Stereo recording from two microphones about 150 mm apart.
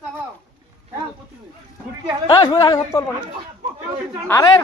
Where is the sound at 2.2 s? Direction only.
30° left (ahead or behind).